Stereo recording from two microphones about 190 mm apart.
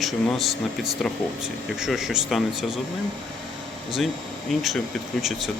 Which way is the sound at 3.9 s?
Centre (ahead or behind).